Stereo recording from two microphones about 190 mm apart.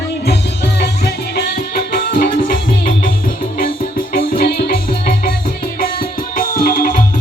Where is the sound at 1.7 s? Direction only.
50° left (ahead or behind).